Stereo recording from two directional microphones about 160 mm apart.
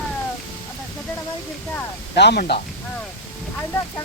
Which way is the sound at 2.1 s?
90° left.